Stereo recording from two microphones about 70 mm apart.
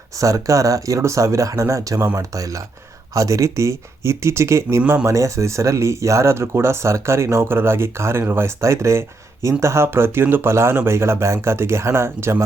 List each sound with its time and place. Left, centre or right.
0.2 s speech: right